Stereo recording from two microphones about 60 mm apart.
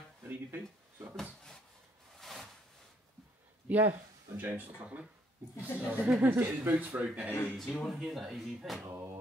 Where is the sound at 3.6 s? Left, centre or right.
Right.